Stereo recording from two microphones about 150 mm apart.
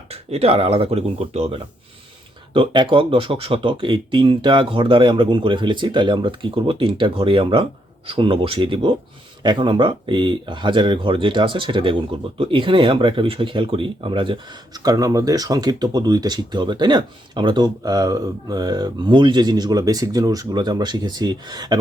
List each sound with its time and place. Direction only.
0.1 s speech: 40° right (ahead or behind)